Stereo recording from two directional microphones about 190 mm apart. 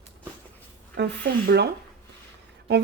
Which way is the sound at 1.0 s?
60° right (ahead or behind).